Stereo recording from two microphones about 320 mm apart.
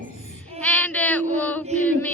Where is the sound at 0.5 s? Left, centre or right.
Centre.